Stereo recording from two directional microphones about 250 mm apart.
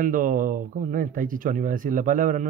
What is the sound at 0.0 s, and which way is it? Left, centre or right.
Speech, right.